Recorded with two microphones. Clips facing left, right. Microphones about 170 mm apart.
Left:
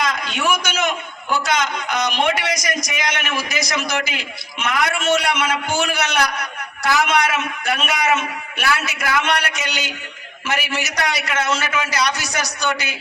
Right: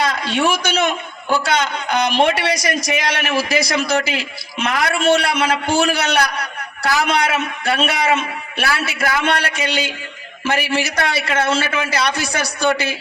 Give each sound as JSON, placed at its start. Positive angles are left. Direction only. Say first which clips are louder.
{"t": 0.0, "sound": "a man's voice", "louder": "right 4 dB", "side_deg": -30}